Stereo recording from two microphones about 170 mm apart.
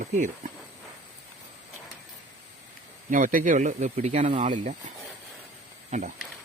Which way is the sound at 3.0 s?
50° right (ahead or behind).